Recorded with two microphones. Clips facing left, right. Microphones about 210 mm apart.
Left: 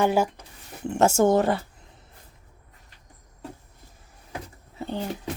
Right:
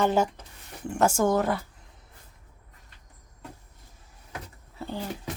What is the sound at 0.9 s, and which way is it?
Speech, 25° left (ahead or behind).